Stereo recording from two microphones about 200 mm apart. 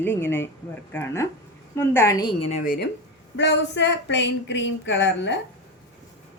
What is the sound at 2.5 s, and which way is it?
Speech, 50° left (ahead or behind).